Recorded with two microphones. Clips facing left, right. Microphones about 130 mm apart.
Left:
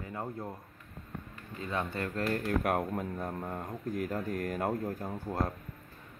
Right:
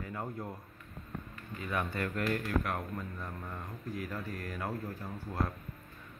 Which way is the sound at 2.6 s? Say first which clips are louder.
Left 6 dB; 55° left (ahead or behind).